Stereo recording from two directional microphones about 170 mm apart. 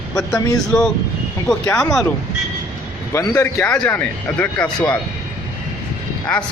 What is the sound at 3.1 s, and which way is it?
Speech, 15° left (ahead or behind).